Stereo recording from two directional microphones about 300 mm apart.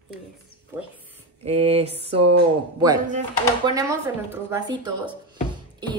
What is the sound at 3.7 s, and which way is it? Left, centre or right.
Speech, centre.